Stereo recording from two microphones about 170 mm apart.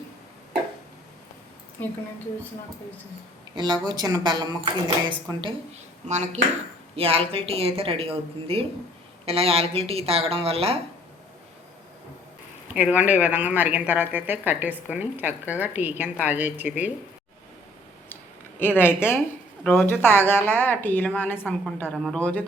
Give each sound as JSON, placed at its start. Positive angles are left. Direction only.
{"t": 1.8, "sound": "a woman's voice", "side_deg": 10}
{"t": 3.5, "sound": "speech", "side_deg": -25}
{"t": 6.1, "sound": "speech", "side_deg": -45}
{"t": 12.7, "sound": "speech", "side_deg": -10}
{"t": 18.8, "sound": "a woman's voice", "side_deg": 15}